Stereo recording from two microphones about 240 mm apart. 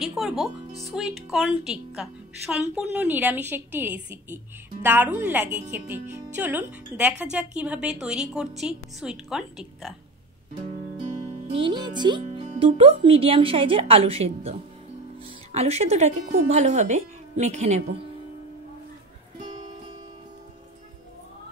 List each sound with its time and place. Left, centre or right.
0.0 s a woman's voice: centre
11.2 s speech: right